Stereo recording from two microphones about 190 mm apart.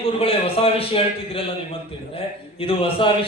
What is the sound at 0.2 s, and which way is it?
A man's voice, 30° left (ahead or behind).